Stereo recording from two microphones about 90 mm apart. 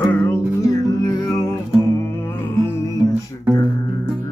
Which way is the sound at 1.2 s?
35° left (ahead or behind).